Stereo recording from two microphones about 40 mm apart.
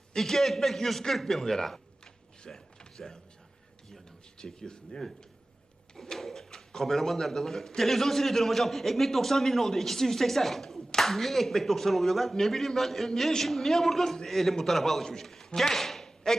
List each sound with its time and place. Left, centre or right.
0.1 s a man's voice: centre
4.4 s a man's voice: centre
15.4 s a sound: centre